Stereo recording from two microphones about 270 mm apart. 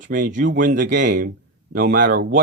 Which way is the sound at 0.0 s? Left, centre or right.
Right.